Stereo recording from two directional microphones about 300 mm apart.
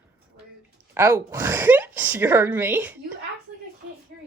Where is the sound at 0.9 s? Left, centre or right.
Centre.